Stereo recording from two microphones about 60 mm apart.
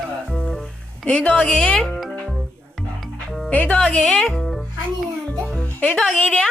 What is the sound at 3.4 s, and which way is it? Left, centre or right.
Speech, left.